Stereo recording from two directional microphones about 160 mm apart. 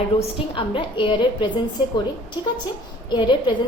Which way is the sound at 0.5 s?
30° left (ahead or behind).